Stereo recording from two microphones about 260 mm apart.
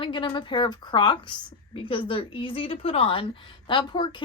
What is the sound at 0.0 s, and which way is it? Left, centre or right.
A woman's voice, centre.